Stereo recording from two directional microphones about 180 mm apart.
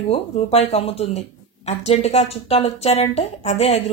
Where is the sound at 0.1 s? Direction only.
35° left (ahead or behind).